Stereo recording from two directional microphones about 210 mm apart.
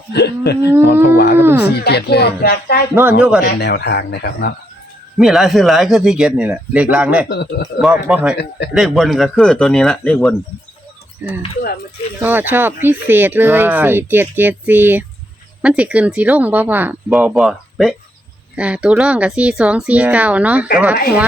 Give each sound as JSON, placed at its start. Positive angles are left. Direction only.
{"t": 0.1, "sound": "speech", "side_deg": 50}
{"t": 1.4, "sound": "speech", "side_deg": -10}
{"t": 1.8, "sound": "speech", "side_deg": 50}
{"t": 2.9, "sound": "speech", "side_deg": -10}
{"t": 3.4, "sound": "speech", "side_deg": 50}
{"t": 5.1, "sound": "speech", "side_deg": 0}
{"t": 7.3, "sound": "speech", "side_deg": 50}
{"t": 7.8, "sound": "speech", "side_deg": -5}
{"t": 8.4, "sound": "speech", "side_deg": 50}
{"t": 8.7, "sound": "speech", "side_deg": 0}
{"t": 11.2, "sound": "speech", "side_deg": -10}